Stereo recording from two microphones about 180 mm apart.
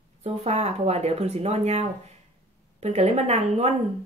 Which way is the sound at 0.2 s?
35° right (ahead or behind).